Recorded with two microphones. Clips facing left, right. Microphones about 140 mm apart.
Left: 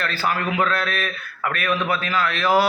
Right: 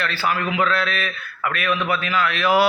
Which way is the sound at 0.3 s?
40° left (ahead or behind).